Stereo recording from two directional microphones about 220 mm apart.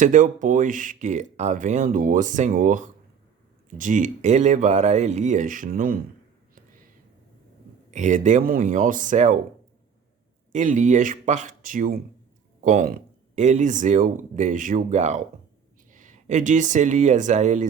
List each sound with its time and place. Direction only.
0.0 s speech: 35° right (ahead or behind)
7.9 s speech: 35° right (ahead or behind)
10.5 s speech: 35° right (ahead or behind)